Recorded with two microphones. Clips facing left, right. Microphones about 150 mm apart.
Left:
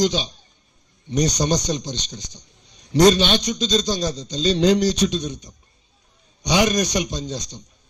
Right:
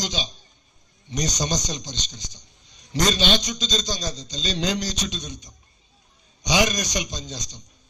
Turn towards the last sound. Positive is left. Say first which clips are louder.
# left 7 dB
turn(degrees=60)  # may be behind; listen again after turning